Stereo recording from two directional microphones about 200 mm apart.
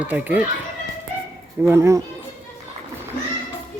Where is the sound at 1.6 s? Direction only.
15° right (ahead or behind).